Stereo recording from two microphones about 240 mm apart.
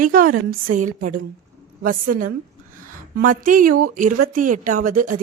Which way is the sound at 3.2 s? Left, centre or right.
Right.